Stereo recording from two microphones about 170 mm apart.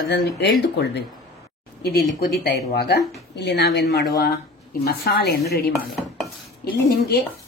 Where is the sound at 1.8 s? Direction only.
70° left (ahead or behind).